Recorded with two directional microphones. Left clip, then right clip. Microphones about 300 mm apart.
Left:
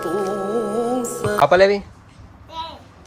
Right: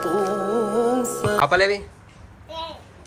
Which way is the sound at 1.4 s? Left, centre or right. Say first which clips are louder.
Left 6 dB; centre.